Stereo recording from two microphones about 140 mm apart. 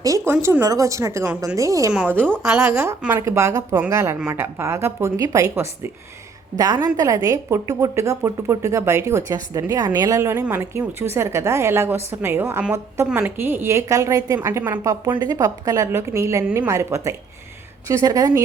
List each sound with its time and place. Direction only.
0.0 s a woman's voice: 20° right (ahead or behind)
2.2 s a woman's voice: 5° left (ahead or behind)
3.0 s a woman's voice: 15° right (ahead or behind)
15.2 s a woman's voice: 30° right (ahead or behind)